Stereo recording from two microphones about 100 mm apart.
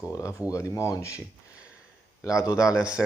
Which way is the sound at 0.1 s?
30° left (ahead or behind).